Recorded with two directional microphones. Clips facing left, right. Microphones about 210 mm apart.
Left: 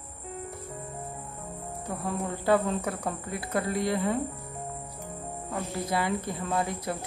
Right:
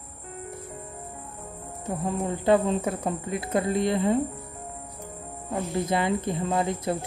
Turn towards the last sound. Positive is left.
turn(degrees=-25)  # may be behind; listen again after turning